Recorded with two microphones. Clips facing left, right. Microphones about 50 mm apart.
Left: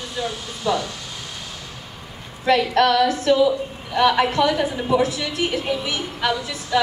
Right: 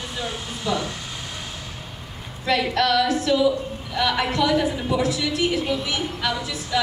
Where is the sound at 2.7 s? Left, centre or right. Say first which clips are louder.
Left 3 dB; left.